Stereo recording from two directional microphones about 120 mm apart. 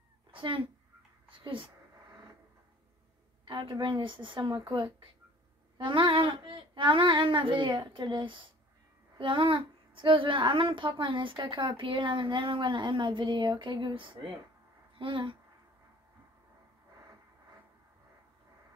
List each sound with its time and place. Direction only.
0.3 s speech: 45° right (ahead or behind)
3.4 s speech: 35° right (ahead or behind)